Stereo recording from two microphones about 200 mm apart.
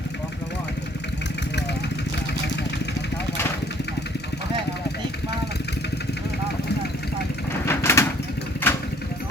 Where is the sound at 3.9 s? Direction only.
55° left (ahead or behind).